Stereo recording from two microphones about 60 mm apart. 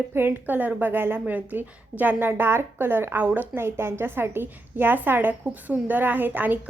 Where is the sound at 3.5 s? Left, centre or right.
Right.